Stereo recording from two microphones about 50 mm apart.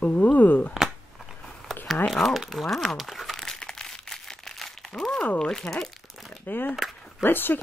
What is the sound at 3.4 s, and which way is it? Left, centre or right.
Crumpling, centre.